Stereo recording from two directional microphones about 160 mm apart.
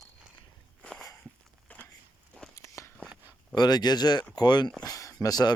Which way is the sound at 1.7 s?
10° left (ahead or behind).